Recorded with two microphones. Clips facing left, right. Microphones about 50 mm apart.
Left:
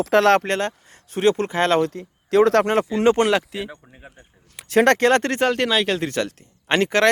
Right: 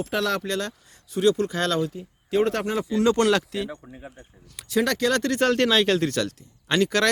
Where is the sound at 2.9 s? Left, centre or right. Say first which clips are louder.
Left 3 dB; left.